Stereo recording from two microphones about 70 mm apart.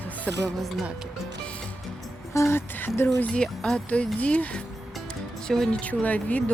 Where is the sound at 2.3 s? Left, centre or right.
Left.